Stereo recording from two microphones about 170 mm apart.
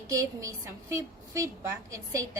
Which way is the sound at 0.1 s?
20° right (ahead or behind).